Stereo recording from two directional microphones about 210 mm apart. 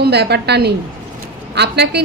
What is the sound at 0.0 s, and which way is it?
A woman's voice, 50° right (ahead or behind).